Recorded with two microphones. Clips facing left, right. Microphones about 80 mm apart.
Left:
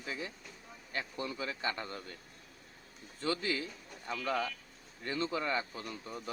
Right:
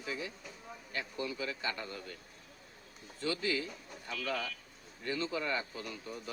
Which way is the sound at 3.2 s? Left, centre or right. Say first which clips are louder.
Even; left.